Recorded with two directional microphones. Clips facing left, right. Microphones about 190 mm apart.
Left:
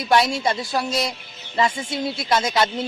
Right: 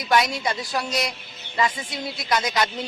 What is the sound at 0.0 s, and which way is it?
Speech, 25° left (ahead or behind).